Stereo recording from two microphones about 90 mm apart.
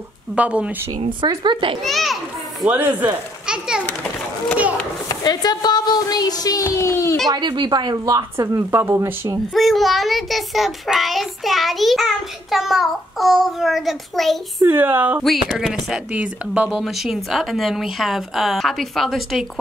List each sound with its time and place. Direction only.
0.4 s speech: 15° right (ahead or behind)
1.3 s a child's voice: 60° right (ahead or behind)
1.8 s a child's voice: centre (ahead or behind)
2.7 s speech: 20° right (ahead or behind)
3.4 s children playing: 10° right (ahead or behind)
5.0 s speech: 50° left (ahead or behind); by 7.2 s 35° left (ahead or behind)
7.2 s speech: 55° right (ahead or behind)
8.5 s speech: 30° right (ahead or behind)
9.5 s a child's voice: centre (ahead or behind)
14.6 s speech: 25° right (ahead or behind)
15.2 s a child's voice: centre (ahead or behind)